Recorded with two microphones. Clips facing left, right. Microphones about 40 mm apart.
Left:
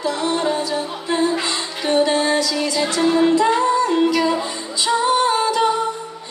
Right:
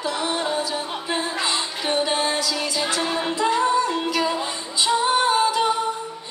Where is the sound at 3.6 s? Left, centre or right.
Centre.